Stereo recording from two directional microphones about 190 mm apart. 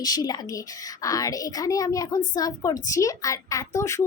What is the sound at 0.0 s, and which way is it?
A woman's voice, 20° left (ahead or behind).